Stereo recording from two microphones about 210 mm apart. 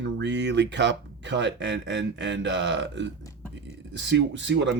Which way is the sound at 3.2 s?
15° left (ahead or behind).